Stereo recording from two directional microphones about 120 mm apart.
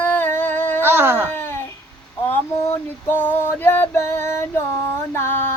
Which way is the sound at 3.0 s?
15° left (ahead or behind).